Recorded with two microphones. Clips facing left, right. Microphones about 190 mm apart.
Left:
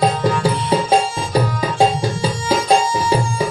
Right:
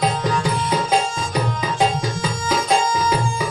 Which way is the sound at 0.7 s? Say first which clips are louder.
Left 4 dB; 30° left (ahead or behind).